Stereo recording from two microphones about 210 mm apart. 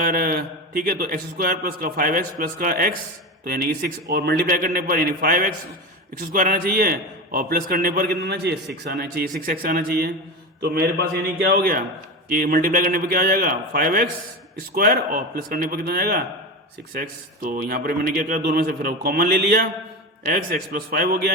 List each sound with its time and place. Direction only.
0.0 s a man's voice: 45° right (ahead or behind)
11.5 s a man's voice: 45° right (ahead or behind)